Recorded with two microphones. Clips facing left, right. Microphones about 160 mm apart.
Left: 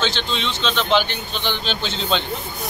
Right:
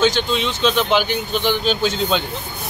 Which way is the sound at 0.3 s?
10° right (ahead or behind).